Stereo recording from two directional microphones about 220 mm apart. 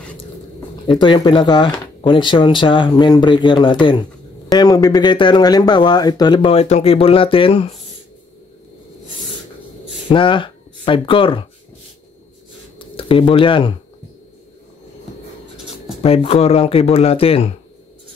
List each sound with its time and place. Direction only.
0.9 s speech: 20° left (ahead or behind)
10.0 s speech: 20° left (ahead or behind)
12.7 s speech: 25° left (ahead or behind)
16.0 s speech: 25° left (ahead or behind)